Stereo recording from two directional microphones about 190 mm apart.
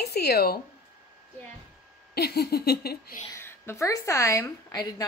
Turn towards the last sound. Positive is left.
turn(degrees=20)  # may be behind; listen again after turning